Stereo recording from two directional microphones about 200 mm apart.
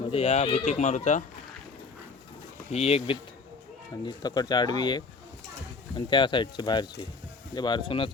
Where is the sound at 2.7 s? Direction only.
30° left (ahead or behind).